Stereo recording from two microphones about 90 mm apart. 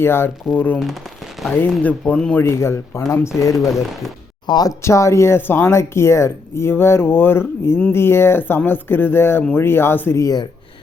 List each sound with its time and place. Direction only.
0.0 s speech: 25° left (ahead or behind); by 2.3 s 10° left (ahead or behind)
2.3 s speech: 30° left (ahead or behind)
3.5 s speech: centre (ahead or behind)
4.4 s speech: 50° left (ahead or behind)
4.8 s speech: 30° left (ahead or behind)